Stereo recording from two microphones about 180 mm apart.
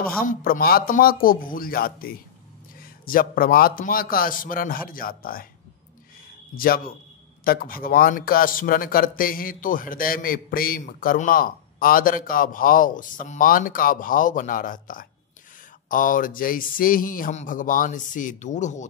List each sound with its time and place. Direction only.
0.2 s speech: 55° left (ahead or behind)
6.5 s speech: 55° left (ahead or behind)